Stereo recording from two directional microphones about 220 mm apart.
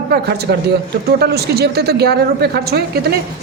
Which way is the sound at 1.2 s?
45° right (ahead or behind).